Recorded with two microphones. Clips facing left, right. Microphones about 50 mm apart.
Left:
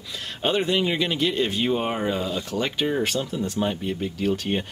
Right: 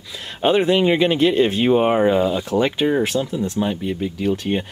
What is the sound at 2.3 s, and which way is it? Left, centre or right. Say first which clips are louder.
Speech: right 7 dB; centre.